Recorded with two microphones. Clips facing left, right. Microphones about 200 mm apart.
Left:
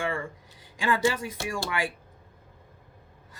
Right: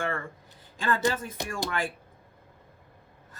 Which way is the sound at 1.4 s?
15° right (ahead or behind).